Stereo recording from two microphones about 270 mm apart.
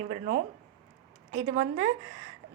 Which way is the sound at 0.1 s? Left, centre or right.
Right.